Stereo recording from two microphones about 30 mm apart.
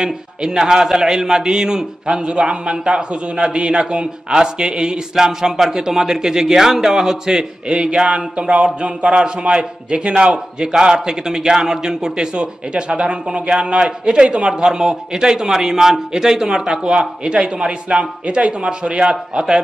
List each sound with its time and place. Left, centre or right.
0.0 s a man's voice: right
7.6 s a man's voice: right
10.7 s a man's voice: right
12.4 s a man's voice: right
19.3 s a man's voice: right